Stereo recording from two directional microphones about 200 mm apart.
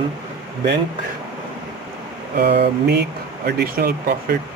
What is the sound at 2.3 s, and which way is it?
Speech, 55° right (ahead or behind).